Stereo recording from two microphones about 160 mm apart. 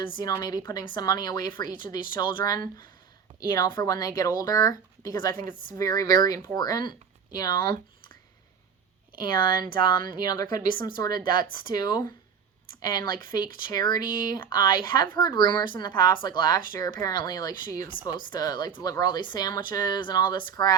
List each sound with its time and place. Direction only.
0.0 s speech: 30° left (ahead or behind)
9.1 s speech: 65° right (ahead or behind)
9.4 s speech: 25° left (ahead or behind)
13.1 s speech: 25° left (ahead or behind)